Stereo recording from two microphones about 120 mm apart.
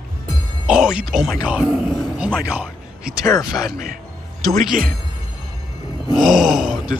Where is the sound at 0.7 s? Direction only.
5° right (ahead or behind).